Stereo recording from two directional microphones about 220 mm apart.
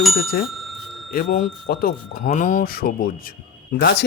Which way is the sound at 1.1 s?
40° left (ahead or behind).